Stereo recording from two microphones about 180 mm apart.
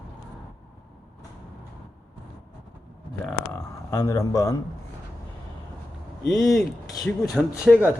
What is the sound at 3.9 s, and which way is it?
Speech, 20° left (ahead or behind).